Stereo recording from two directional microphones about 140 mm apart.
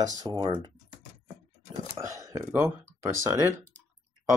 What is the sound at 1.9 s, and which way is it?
Speech, 25° right (ahead or behind).